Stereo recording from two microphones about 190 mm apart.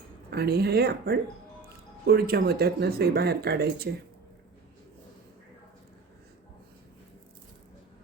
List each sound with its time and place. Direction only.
0.3 s speech: 55° right (ahead or behind)